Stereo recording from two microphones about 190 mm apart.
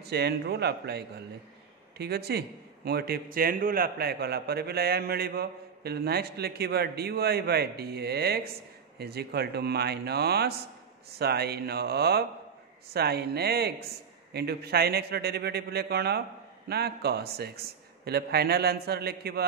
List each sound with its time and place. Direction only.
0.0 s a man's voice: 60° right (ahead or behind)